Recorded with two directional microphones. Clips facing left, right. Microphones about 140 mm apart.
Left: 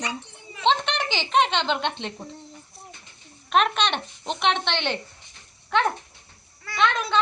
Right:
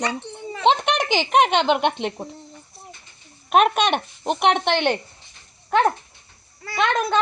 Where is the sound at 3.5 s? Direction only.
50° right (ahead or behind).